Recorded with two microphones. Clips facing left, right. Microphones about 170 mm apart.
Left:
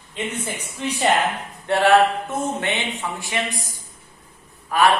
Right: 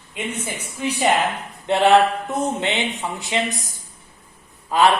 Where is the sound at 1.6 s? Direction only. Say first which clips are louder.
Right 1 dB; 20° right (ahead or behind).